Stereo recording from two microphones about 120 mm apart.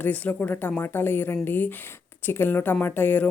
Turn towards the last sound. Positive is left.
turn(degrees=15)  # may be behind; listen again after turning